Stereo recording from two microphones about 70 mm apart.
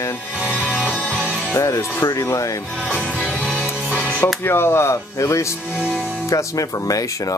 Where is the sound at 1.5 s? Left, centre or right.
Left.